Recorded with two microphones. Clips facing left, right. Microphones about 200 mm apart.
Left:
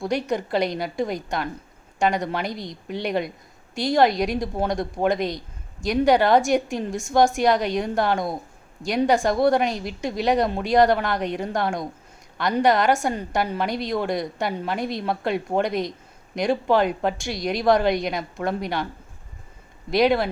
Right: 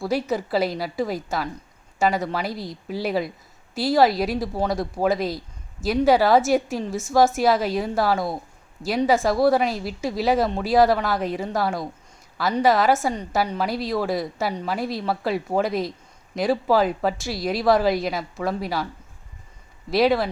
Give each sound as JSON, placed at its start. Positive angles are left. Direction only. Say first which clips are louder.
{"t": 0.0, "sound": "a woman's voice", "louder": "even", "side_deg": -5}
{"t": 19.9, "sound": "a woman's voice", "louder": "even", "side_deg": 0}